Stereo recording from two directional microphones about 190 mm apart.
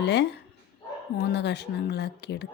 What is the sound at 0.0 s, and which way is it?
Speech, 65° left (ahead or behind).